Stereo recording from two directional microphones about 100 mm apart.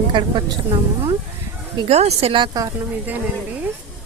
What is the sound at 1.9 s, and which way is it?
Speech, 90° right.